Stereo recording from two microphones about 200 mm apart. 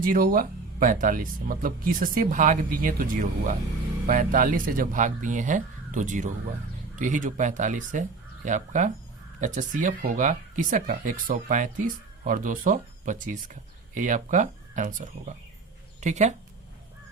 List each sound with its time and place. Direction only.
0.0 s speech: 45° right (ahead or behind)